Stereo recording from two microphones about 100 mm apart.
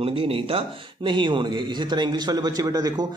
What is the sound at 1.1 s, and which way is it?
A man's voice, 55° right (ahead or behind).